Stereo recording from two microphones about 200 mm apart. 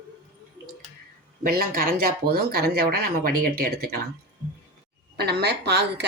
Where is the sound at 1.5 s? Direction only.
50° right (ahead or behind).